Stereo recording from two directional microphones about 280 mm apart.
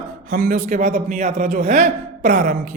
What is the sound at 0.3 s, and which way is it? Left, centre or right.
A man's voice, right.